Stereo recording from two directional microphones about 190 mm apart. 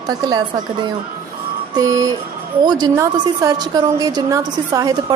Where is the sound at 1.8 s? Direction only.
20° right (ahead or behind).